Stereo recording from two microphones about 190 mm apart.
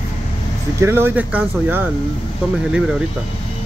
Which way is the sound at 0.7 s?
10° right (ahead or behind).